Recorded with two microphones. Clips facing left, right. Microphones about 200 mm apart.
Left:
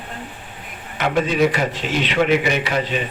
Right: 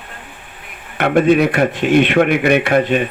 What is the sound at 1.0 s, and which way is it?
A man's voice, 60° right (ahead or behind).